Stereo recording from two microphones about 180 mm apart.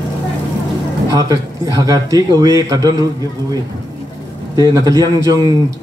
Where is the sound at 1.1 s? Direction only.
20° right (ahead or behind).